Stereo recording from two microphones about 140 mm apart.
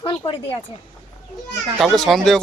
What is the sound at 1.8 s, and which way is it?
Speech, centre (ahead or behind).